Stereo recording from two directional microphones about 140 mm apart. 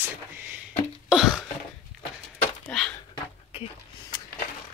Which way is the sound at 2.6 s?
5° left (ahead or behind).